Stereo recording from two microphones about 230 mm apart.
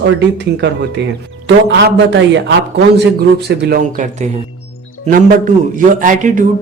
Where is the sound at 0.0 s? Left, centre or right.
Right.